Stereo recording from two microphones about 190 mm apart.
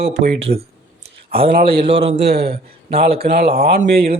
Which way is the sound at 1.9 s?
30° right (ahead or behind).